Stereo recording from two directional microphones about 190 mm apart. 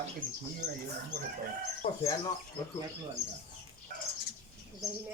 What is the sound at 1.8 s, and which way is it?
Speech, 30° left (ahead or behind).